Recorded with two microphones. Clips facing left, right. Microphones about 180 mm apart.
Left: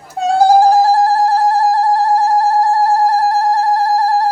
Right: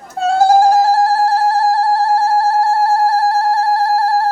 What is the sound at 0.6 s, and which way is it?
Music, 15° left (ahead or behind).